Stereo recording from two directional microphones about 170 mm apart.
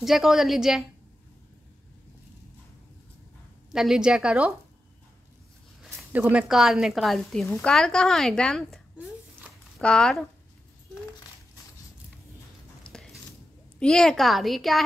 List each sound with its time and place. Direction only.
0.0 s a woman's voice: centre (ahead or behind)
3.7 s a woman's voice: 5° right (ahead or behind)
5.8 s a woman's voice: 10° right (ahead or behind)
7.4 s speech: 15° left (ahead or behind)
7.7 s a woman's voice: 5° left (ahead or behind)
12.8 s a sound: 5° left (ahead or behind)
13.7 s a woman's voice: 5° left (ahead or behind)